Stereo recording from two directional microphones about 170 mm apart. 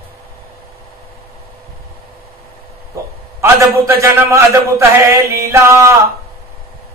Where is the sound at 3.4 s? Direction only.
15° right (ahead or behind).